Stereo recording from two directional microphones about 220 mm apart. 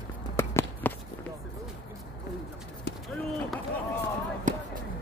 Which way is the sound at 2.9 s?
50° left (ahead or behind).